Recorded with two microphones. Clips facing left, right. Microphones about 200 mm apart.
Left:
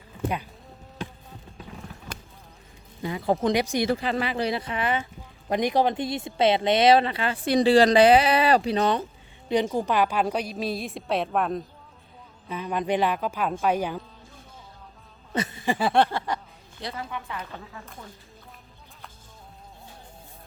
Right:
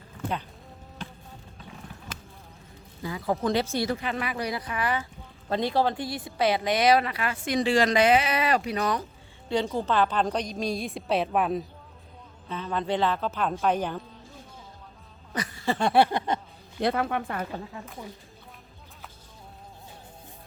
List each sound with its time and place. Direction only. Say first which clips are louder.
3.0 s a woman's voice: left 3 dB; 25° left (ahead or behind)
3.8 s a woman's voice: left 4 dB; 35° left (ahead or behind); by 11.6 s 5° right (ahead or behind)
12.5 s speech: left 2 dB; 15° left (ahead or behind)
15.3 s a sound: left 2 dB; 25° left (ahead or behind)
15.8 s a woman's voice: right 1 dB; 5° right (ahead or behind)
16.1 s a sound: right 2 dB; 20° right (ahead or behind)
16.8 s a woman's voice: right 9 dB; 60° right (ahead or behind)